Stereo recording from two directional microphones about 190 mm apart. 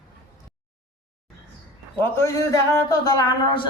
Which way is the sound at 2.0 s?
10° left (ahead or behind).